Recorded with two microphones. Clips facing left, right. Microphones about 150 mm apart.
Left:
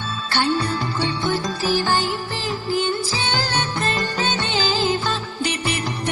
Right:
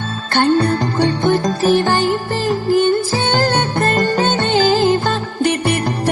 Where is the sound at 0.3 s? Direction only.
50° right (ahead or behind).